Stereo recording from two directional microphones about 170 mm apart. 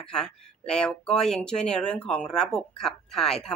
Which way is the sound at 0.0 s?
5° left (ahead or behind).